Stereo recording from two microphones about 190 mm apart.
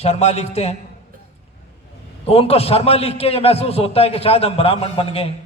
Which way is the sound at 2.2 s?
30° left (ahead or behind).